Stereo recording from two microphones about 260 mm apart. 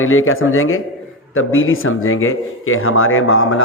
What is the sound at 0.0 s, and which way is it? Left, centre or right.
Speech, left.